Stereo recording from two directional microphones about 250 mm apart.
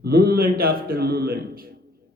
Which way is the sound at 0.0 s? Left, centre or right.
Right.